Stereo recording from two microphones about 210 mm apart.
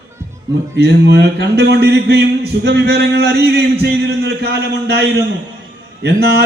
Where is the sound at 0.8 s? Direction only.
55° right (ahead or behind).